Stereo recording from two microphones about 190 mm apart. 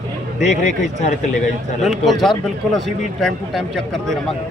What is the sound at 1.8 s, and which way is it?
Speech, centre (ahead or behind).